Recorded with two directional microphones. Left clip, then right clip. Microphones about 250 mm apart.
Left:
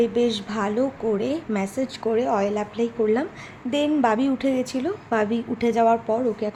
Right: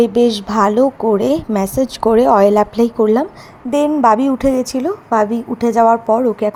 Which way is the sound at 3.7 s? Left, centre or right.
Centre.